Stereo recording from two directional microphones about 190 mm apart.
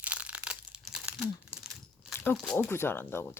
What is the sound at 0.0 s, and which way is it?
Crumpling, 5° right (ahead or behind).